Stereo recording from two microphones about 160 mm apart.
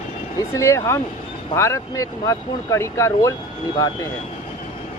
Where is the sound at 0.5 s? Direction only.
20° left (ahead or behind).